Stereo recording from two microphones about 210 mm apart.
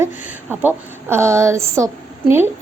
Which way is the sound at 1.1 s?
15° right (ahead or behind).